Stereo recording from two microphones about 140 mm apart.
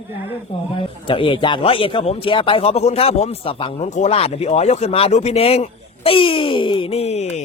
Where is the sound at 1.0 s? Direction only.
35° left (ahead or behind).